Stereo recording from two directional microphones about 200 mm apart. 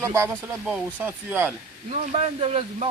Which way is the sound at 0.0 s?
15° right (ahead or behind).